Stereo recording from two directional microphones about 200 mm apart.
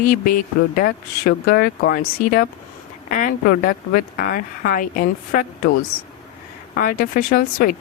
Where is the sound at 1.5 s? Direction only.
50° left (ahead or behind).